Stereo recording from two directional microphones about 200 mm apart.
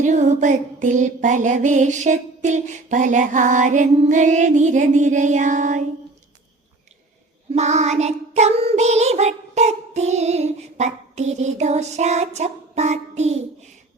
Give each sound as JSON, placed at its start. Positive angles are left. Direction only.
{"t": 0.0, "sound": "music", "side_deg": -35}
{"t": 7.5, "sound": "music", "side_deg": -35}